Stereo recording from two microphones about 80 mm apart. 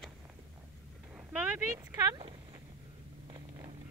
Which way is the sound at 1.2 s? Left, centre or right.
Centre.